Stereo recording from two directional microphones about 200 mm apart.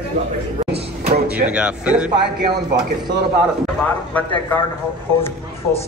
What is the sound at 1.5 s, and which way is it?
Speech, 5° right (ahead or behind).